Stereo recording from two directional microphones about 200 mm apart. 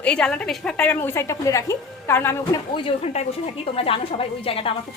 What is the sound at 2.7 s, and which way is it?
A woman's voice, 30° left (ahead or behind).